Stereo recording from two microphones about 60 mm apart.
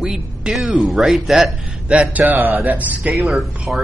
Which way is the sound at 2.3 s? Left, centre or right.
Right.